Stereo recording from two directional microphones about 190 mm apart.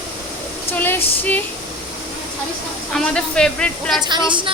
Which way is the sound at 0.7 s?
10° left (ahead or behind).